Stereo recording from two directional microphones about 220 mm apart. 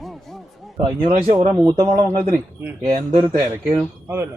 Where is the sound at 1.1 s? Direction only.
30° right (ahead or behind).